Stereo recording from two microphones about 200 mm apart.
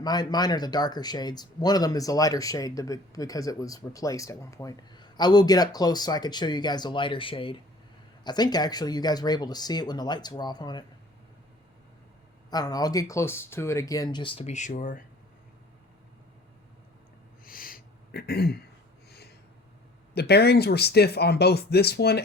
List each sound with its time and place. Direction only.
0.0 s speech: 20° left (ahead or behind)
12.5 s speech: 20° left (ahead or behind); by 15.0 s 40° left (ahead or behind)
17.4 s a sound: 45° left (ahead or behind)
20.1 s speech: 55° left (ahead or behind)